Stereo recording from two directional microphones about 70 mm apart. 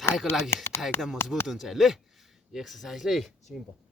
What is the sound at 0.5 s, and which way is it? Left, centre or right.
Speech, left.